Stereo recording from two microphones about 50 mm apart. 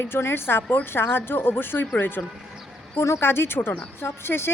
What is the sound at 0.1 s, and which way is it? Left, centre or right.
Speech, left.